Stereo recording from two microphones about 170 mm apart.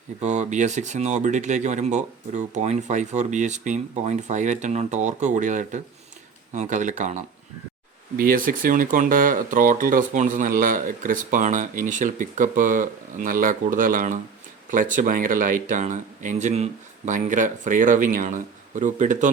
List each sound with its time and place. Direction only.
0.2 s speech: 45° right (ahead or behind)
8.1 s speech: 55° right (ahead or behind)